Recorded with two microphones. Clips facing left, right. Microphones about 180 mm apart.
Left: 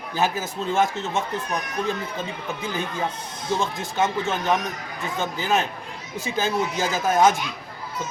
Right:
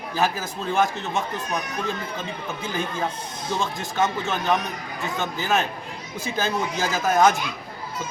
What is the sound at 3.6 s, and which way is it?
Speech, 15° left (ahead or behind).